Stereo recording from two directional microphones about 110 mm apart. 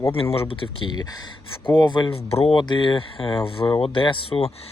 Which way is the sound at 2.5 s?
45° left (ahead or behind).